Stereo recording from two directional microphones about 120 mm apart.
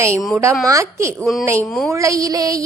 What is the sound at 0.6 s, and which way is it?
Speech, 25° right (ahead or behind).